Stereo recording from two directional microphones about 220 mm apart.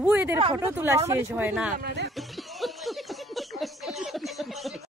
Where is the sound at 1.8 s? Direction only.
50° right (ahead or behind).